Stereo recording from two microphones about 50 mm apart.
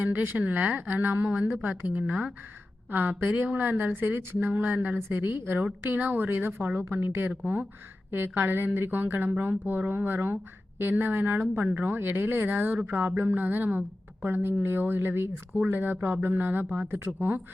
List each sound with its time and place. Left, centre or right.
0.0 s a woman's voice: right
5.1 s a woman's voice: right
5.8 s a woman's voice: right
7.0 s a woman's voice: right
7.3 s a woman's voice: right
14.3 s a woman's voice: right